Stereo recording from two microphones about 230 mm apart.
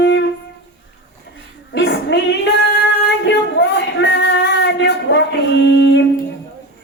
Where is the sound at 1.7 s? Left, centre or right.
Left.